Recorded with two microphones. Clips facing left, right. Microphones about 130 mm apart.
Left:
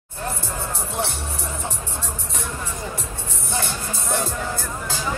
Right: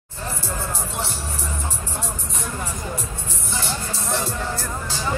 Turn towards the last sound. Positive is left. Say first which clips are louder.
# even
turn(degrees=55)  # may be behind; listen again after turning